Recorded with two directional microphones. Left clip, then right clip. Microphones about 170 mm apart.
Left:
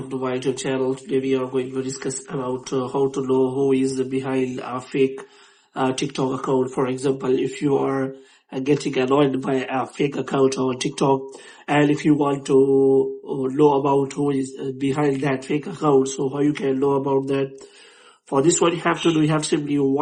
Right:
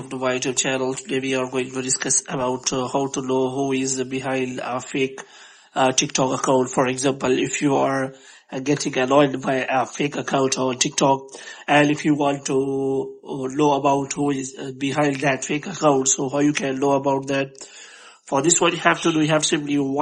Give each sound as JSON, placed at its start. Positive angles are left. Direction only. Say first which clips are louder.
{"t": 0.1, "sound": "speech", "louder": "right 1 dB", "side_deg": -30}